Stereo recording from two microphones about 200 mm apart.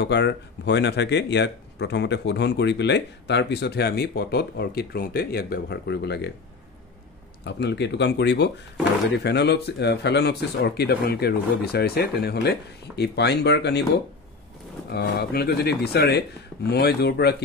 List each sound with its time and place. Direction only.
0.0 s speech: 60° left (ahead or behind)
7.4 s speech: 60° left (ahead or behind)
14.9 s speech: 50° left (ahead or behind)